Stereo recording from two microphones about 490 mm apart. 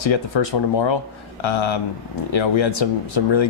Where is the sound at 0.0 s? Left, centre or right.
Left.